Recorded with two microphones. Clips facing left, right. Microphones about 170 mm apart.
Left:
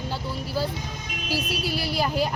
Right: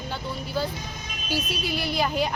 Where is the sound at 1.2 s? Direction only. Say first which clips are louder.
Left 1 dB; 5° left (ahead or behind).